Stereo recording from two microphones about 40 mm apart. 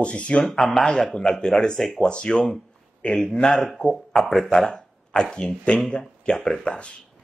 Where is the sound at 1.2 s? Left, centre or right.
Centre.